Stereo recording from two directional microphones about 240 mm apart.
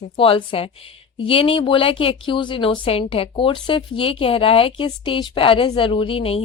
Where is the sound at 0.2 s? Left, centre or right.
Left.